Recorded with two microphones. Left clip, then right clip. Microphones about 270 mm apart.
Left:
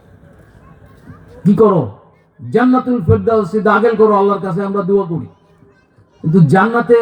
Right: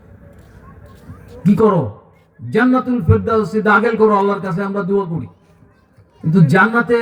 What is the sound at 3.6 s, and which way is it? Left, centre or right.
Speech, right.